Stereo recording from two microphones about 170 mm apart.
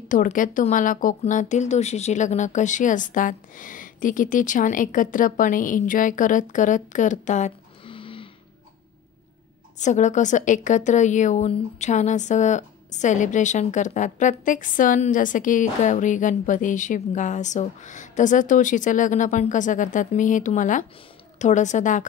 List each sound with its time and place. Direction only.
0.1 s a woman's voice: 50° left (ahead or behind)
7.8 s a sound: 30° left (ahead or behind)
9.8 s a woman's voice: 45° left (ahead or behind)